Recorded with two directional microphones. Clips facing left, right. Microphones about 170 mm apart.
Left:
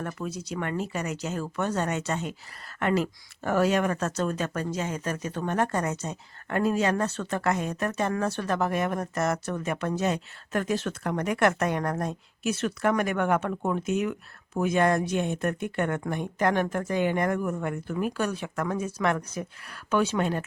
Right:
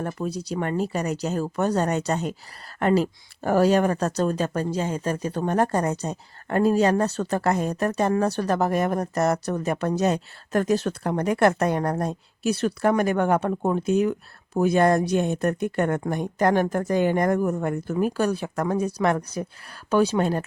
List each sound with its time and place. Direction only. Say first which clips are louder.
0.0 s speech: right 5 dB; 35° right (ahead or behind)